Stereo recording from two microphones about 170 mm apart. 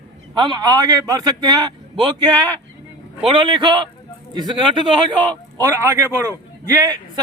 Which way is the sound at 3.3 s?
30° right (ahead or behind).